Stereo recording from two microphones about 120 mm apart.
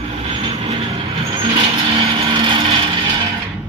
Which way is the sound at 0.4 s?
55° right (ahead or behind).